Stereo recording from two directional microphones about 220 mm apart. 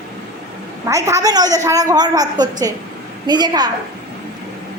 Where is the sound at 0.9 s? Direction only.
15° right (ahead or behind).